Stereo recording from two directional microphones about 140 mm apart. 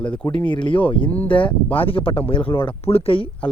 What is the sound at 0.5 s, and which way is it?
Speech, 35° left (ahead or behind).